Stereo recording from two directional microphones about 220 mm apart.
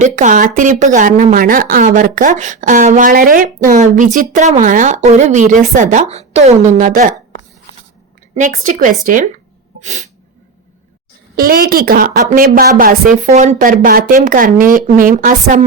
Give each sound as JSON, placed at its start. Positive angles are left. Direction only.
{"t": 0.0, "sound": "a woman's voice", "side_deg": -35}
{"t": 8.4, "sound": "a woman's voice", "side_deg": -35}
{"t": 11.3, "sound": "a woman's voice", "side_deg": -40}